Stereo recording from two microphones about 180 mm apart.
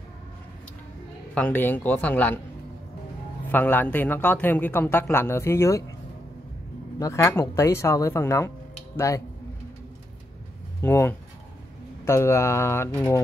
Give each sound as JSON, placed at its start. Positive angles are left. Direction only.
{"t": 1.3, "sound": "a man's voice", "side_deg": 10}
{"t": 3.4, "sound": "a man's voice", "side_deg": 10}
{"t": 7.0, "sound": "a man's voice", "side_deg": 15}
{"t": 10.8, "sound": "a man's voice", "side_deg": 15}